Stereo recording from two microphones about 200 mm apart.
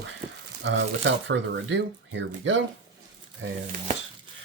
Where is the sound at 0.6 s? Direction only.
65° right (ahead or behind).